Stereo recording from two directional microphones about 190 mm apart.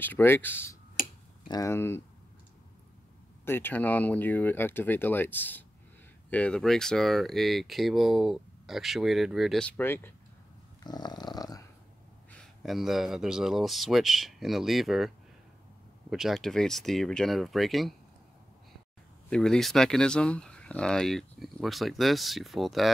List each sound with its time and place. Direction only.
0.0 s speech: 10° left (ahead or behind)
1.0 s tick-tock: 45° left (ahead or behind)
1.5 s speech: 15° left (ahead or behind)
3.4 s speech: 10° left (ahead or behind)
10.8 s dog: 20° left (ahead or behind)
12.3 s speech: centre (ahead or behind)
19.2 s speech: 5° left (ahead or behind)